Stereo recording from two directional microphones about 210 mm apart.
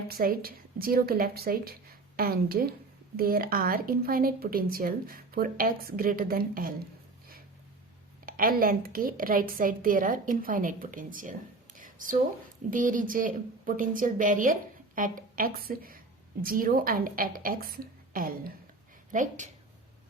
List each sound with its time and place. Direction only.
0.1 s a woman's voice: 45° right (ahead or behind)
8.3 s a woman's voice: 45° right (ahead or behind)
11.8 s a sound: 40° right (ahead or behind)
12.7 s a woman's voice: 40° right (ahead or behind)